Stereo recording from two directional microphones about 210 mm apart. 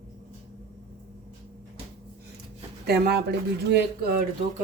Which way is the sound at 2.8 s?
50° right (ahead or behind).